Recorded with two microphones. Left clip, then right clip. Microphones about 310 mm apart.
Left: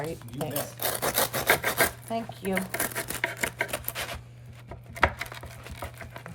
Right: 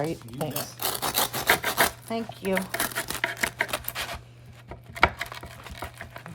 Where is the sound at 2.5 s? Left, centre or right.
Centre.